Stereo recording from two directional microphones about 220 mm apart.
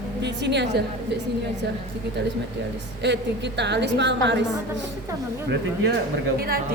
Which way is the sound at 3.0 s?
50° right (ahead or behind).